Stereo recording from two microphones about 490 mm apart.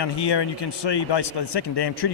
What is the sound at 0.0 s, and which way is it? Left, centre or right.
A man's voice, left.